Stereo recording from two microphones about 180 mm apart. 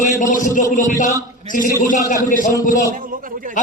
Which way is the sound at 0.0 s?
45° left (ahead or behind).